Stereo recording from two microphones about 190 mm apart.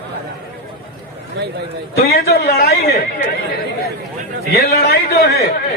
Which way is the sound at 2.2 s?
55° left (ahead or behind).